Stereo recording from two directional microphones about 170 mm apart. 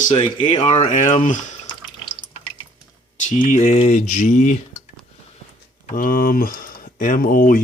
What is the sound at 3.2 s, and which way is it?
Speech, 45° left (ahead or behind).